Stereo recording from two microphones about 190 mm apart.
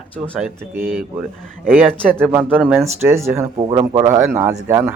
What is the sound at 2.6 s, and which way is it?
Speech, 10° right (ahead or behind).